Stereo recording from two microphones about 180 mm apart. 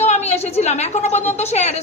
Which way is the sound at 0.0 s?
35° left (ahead or behind).